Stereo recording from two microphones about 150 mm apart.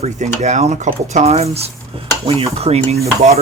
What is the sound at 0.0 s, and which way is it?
Speech, 50° right (ahead or behind).